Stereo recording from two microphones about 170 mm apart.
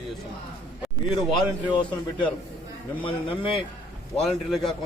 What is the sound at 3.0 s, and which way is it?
Speech, 30° left (ahead or behind).